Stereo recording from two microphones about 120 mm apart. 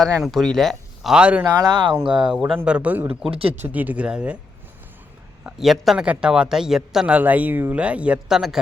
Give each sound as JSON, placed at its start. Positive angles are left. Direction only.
{"t": 0.0, "sound": "speech", "side_deg": 0}
{"t": 1.6, "sound": "speech", "side_deg": -35}
{"t": 2.6, "sound": "speech", "side_deg": -10}
{"t": 3.2, "sound": "speech", "side_deg": -50}
{"t": 3.5, "sound": "speech", "side_deg": -15}
{"t": 5.4, "sound": "a man's voice", "side_deg": -5}